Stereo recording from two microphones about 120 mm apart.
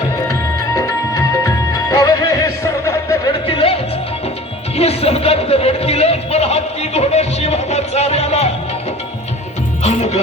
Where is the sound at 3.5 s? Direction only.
55° left (ahead or behind).